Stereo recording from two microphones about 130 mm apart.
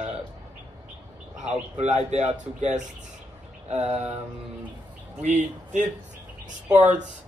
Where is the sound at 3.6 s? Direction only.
55° right (ahead or behind).